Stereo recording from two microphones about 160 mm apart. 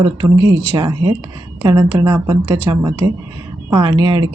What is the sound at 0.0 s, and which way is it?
A woman's voice, 25° right (ahead or behind).